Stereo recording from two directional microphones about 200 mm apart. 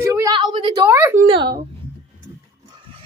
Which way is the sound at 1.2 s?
20° right (ahead or behind).